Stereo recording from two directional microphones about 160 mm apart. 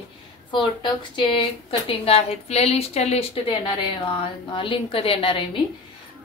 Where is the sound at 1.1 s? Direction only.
35° left (ahead or behind).